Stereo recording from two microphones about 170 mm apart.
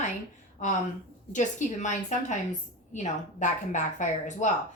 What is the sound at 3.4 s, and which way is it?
A woman's voice, 45° left (ahead or behind).